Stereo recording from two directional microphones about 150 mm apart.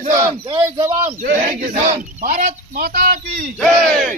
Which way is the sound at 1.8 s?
50° right (ahead or behind).